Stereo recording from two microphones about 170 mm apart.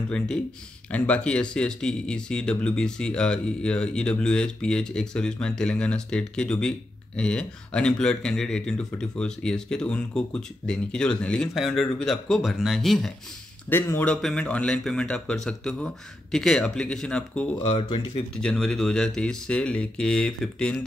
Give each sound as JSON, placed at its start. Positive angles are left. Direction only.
{"t": 0.9, "sound": "speech", "side_deg": 10}
{"t": 13.7, "sound": "speech", "side_deg": 10}
{"t": 17.6, "sound": "speech", "side_deg": 35}
{"t": 18.4, "sound": "speech", "side_deg": 5}